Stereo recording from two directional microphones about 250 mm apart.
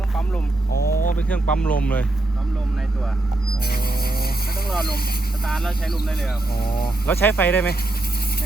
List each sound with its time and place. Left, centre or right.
0.7 s a sound: left
1.3 s speech: centre
5.5 s speech: centre
6.6 s speech: left
7.1 s speech: centre